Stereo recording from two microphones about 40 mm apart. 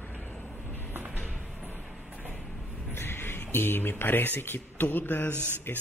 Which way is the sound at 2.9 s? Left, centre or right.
Left.